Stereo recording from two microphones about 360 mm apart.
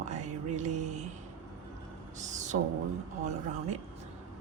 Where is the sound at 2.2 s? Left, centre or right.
Centre.